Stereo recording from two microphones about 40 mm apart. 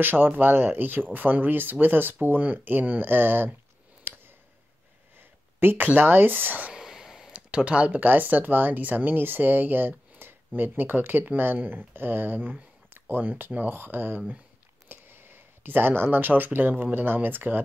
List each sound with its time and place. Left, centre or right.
0.0 s speech: right
4.1 s a sound: right
5.8 s speech: right
6.7 s a sound: centre
7.3 s speech: right
13.1 s speech: right